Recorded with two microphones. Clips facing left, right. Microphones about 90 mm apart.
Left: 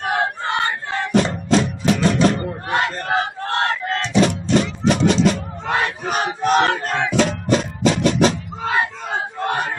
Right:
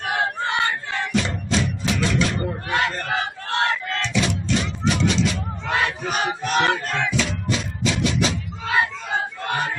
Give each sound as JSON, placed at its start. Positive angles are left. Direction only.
{"t": 0.0, "sound": "crowd", "side_deg": 40}
{"t": 7.1, "sound": "music", "side_deg": 45}
{"t": 9.4, "sound": "a sound", "side_deg": 45}